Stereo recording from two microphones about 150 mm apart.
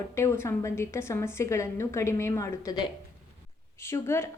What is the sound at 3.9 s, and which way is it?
Speech, 15° left (ahead or behind).